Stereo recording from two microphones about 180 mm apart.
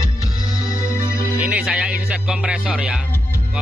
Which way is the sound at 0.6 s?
20° left (ahead or behind).